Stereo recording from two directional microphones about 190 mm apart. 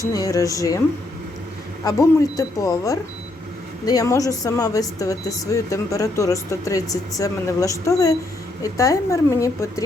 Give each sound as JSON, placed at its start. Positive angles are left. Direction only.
{"t": 0.0, "sound": "speech", "side_deg": 20}
{"t": 1.8, "sound": "speech", "side_deg": 20}